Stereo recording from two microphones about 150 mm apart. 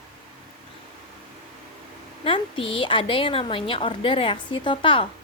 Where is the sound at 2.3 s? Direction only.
35° left (ahead or behind).